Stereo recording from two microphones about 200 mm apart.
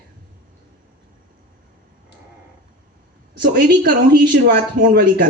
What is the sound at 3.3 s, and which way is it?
Speech, 55° right (ahead or behind).